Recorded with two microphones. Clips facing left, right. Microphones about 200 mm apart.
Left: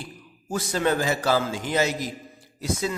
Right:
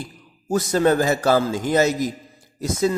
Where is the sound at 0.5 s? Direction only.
40° right (ahead or behind).